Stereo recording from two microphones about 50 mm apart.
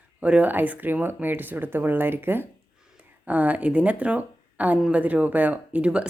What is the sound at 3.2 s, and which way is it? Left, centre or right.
Speech, right.